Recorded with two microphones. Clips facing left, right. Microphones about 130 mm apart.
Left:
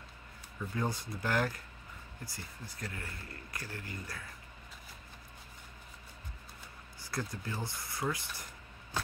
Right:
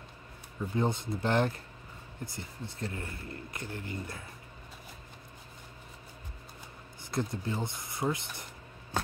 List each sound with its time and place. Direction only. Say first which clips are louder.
0.6 s speech: right 5 dB; 25° right (ahead or behind)
7.0 s speech: right 6 dB; 25° right (ahead or behind)